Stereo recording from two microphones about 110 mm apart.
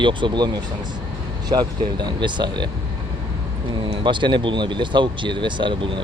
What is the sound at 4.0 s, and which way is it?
Speech, 45° right (ahead or behind).